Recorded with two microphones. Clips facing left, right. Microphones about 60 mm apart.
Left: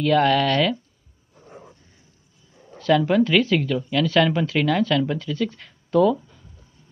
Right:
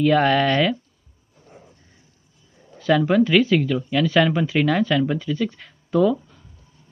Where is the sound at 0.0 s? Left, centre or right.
Centre.